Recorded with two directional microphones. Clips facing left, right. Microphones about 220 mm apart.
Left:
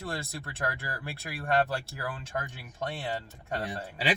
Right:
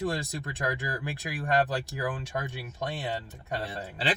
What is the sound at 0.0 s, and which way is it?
Speech, 15° right (ahead or behind).